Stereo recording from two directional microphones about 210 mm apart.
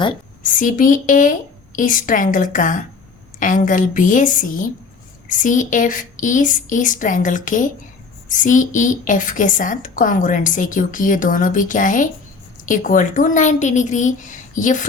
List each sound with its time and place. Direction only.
0.4 s a woman's voice: 40° left (ahead or behind)